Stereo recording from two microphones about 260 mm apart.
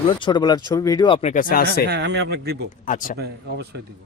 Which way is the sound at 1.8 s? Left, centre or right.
Right.